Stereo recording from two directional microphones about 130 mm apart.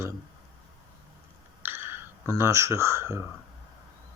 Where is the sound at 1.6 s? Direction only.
15° right (ahead or behind).